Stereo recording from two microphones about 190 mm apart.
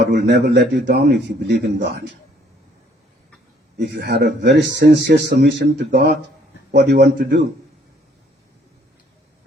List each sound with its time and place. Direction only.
0.0 s a man's voice: 60° right (ahead or behind)
3.8 s a man's voice: 65° right (ahead or behind)